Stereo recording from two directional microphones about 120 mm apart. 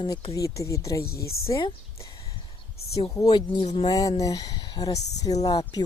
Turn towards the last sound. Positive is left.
turn(degrees=30)  # may be behind; listen again after turning